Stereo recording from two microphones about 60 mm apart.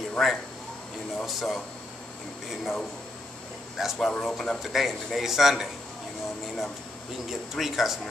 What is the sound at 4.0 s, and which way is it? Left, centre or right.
Speech, centre.